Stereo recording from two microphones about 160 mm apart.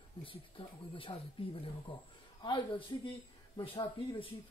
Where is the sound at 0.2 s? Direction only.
35° left (ahead or behind).